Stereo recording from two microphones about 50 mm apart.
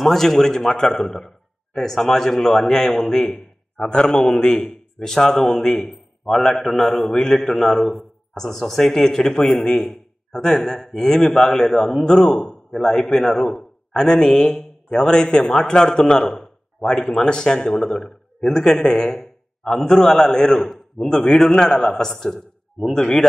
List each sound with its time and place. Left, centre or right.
0.0 s a man's voice: centre